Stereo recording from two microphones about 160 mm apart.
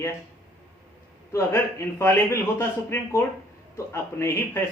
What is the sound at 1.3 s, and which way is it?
A man's voice, 15° left (ahead or behind).